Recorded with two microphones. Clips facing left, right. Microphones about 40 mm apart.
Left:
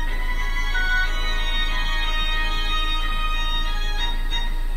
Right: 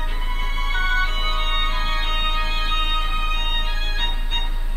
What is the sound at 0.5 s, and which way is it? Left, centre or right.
Music, right.